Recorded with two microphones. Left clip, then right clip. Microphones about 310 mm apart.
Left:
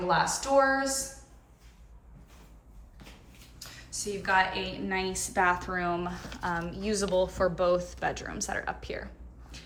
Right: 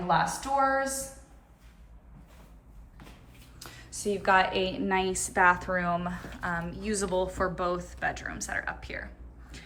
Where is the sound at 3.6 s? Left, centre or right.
Centre.